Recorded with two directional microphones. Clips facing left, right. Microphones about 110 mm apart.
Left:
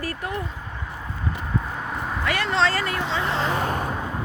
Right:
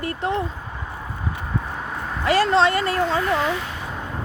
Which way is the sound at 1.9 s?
Centre (ahead or behind).